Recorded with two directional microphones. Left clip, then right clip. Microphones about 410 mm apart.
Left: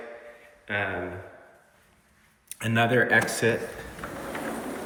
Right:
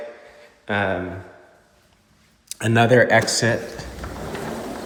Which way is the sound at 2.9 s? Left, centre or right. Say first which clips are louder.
Right 7 dB; right.